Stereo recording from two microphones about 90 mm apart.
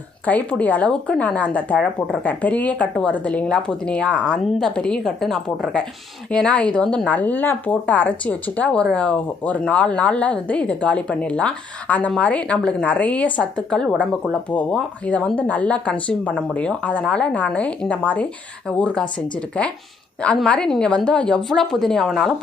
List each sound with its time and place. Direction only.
0.3 s speech: 15° left (ahead or behind)
19.6 s speech: 15° left (ahead or behind)